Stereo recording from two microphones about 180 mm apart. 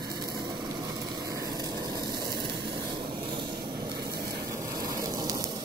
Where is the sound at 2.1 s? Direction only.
60° right (ahead or behind).